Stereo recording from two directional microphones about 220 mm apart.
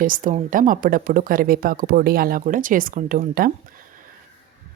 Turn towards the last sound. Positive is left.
turn(degrees=-40)  # may be behind; listen again after turning